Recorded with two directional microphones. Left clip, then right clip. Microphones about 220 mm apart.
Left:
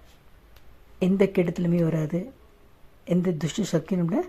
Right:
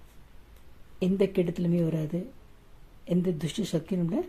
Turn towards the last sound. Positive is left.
turn(degrees=15)  # may be behind; listen again after turning